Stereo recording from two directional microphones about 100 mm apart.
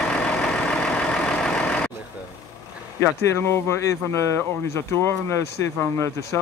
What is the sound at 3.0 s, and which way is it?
Speech, 25° left (ahead or behind).